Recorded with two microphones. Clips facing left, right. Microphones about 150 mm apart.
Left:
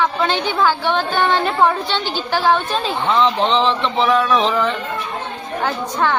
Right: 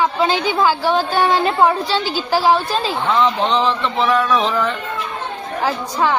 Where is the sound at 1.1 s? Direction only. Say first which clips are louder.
Right 1 dB; 10° right (ahead or behind).